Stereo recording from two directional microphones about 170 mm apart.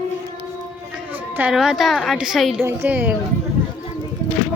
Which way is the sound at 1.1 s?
10° right (ahead or behind).